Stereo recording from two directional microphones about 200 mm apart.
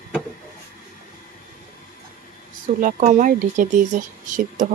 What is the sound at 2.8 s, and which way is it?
Speech, 40° right (ahead or behind).